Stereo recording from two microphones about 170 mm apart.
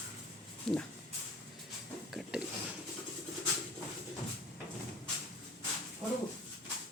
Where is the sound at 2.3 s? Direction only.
5° right (ahead or behind).